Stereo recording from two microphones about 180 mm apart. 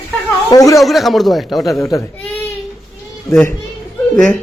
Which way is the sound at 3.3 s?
10° left (ahead or behind).